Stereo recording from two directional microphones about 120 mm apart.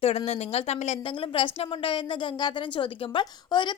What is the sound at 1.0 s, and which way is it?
A woman's voice, 45° left (ahead or behind).